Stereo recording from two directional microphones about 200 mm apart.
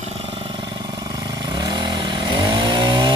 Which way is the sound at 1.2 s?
20° right (ahead or behind).